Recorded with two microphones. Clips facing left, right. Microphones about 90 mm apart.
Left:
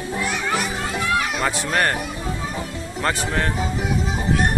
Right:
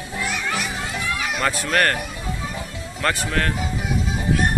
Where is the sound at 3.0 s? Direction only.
20° left (ahead or behind).